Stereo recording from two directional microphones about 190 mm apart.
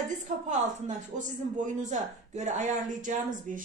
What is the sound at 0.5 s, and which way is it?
A woman's voice, 40° right (ahead or behind).